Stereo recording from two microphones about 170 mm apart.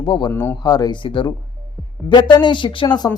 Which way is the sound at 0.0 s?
25° left (ahead or behind).